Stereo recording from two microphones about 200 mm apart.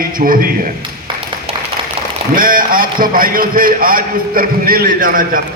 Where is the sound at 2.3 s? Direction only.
45° right (ahead or behind).